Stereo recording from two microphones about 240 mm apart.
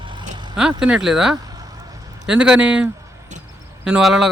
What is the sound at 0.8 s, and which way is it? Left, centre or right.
Speech, centre.